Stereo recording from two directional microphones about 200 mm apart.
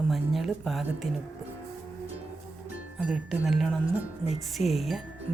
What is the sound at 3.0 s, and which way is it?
Speech, centre (ahead or behind).